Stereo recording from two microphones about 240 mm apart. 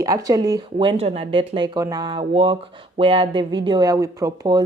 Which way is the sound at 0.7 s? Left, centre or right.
Right.